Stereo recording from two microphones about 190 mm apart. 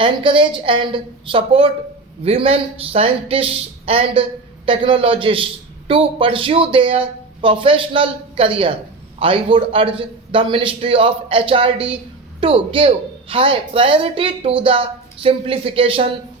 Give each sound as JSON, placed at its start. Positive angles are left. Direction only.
{"t": 0.0, "sound": "a woman's voice", "side_deg": -25}